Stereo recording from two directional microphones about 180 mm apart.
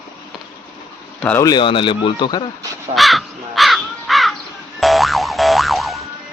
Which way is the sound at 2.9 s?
Centre (ahead or behind).